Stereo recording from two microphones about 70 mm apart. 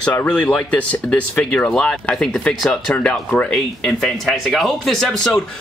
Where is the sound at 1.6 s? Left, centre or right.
Centre.